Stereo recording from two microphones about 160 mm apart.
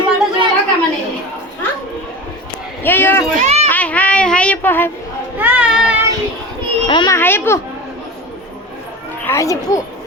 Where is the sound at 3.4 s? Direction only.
45° right (ahead or behind).